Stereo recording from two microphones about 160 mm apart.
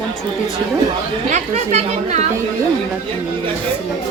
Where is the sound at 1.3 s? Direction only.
45° right (ahead or behind).